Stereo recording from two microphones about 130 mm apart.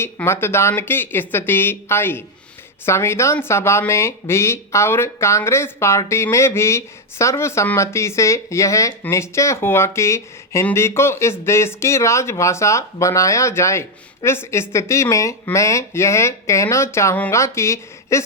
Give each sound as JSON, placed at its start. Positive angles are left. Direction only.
{"t": 0.0, "sound": "speech", "side_deg": 20}